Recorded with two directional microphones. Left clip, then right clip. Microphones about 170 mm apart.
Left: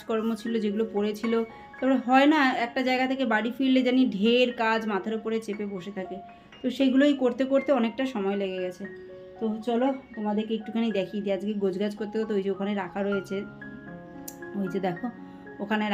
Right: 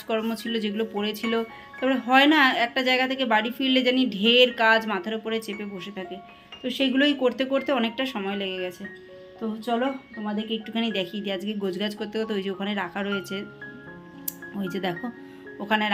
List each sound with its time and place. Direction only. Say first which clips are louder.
0.1 s speech: right 1 dB; centre (ahead or behind)
14.6 s speech: even; 5° right (ahead or behind)